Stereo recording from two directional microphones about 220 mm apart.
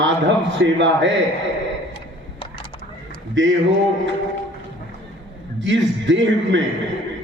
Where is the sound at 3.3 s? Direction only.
55° right (ahead or behind).